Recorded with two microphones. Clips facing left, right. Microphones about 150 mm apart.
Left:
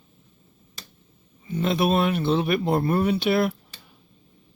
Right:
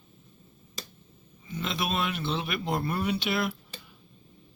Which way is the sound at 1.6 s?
45° left (ahead or behind).